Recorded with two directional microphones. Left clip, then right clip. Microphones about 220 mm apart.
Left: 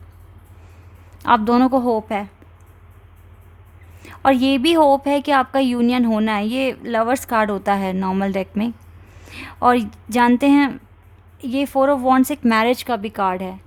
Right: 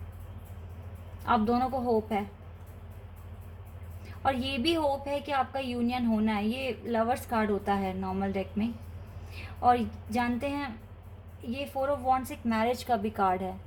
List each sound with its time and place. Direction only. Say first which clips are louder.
1.2 s a woman's voice: left 11 dB; 45° left (ahead or behind)
4.2 s a woman's voice: left 13 dB; 45° left (ahead or behind)